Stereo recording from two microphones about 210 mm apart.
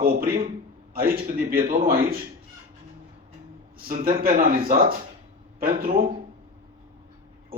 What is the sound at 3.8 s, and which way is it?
A man's voice, 40° right (ahead or behind).